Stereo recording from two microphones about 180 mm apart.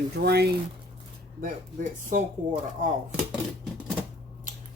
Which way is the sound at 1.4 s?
45° right (ahead or behind).